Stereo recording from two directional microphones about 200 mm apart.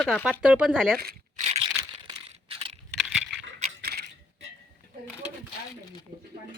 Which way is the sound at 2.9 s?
Centre (ahead or behind).